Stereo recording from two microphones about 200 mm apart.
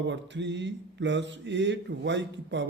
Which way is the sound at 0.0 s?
60° right (ahead or behind).